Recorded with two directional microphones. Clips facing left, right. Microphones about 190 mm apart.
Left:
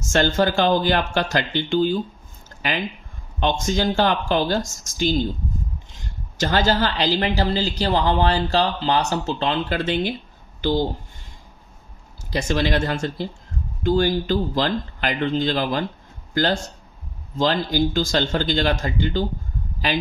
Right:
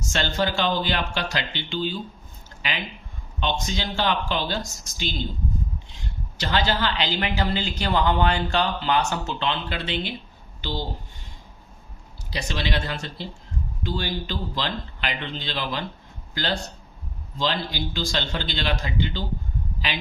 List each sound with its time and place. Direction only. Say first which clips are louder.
0.0 s speech: left 6 dB; 50° left (ahead or behind)
12.3 s speech: left 7 dB; 45° left (ahead or behind)